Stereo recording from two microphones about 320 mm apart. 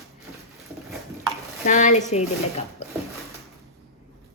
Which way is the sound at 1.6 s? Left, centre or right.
Left.